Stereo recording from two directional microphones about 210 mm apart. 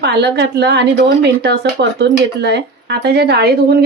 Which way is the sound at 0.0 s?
50° right (ahead or behind).